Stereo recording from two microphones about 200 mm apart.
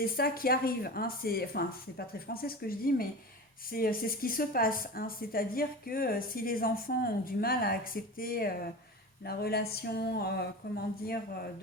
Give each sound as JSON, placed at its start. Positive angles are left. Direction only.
{"t": 0.0, "sound": "speech", "side_deg": 50}